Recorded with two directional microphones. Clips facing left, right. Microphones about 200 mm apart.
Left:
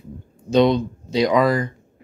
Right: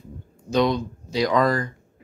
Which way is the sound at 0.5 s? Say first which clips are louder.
Left 5 dB; 25° left (ahead or behind).